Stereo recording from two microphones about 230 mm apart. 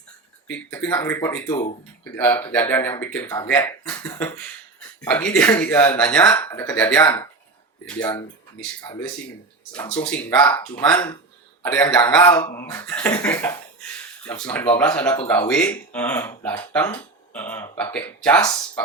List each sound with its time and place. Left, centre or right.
0.4 s speech: centre
8.9 s speech: centre
9.7 s speech: centre
10.4 s speech: left
10.8 s speech: centre
13.8 s a sound: centre
14.6 s speech: centre